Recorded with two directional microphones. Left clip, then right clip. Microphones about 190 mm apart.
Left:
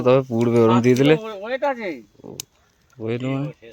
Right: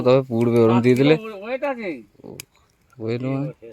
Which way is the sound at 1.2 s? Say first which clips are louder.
Left 2 dB; 50° right (ahead or behind).